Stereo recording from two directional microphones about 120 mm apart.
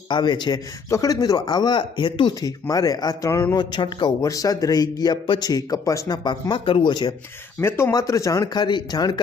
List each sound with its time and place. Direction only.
0.1 s a man's voice: 40° left (ahead or behind)
0.9 s a man's voice: 25° left (ahead or behind)
3.6 s a man's voice: 40° left (ahead or behind)
7.6 s a man's voice: 20° left (ahead or behind)